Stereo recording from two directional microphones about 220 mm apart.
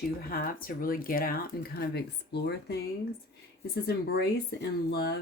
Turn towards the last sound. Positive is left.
turn(degrees=45)  # may be behind; listen again after turning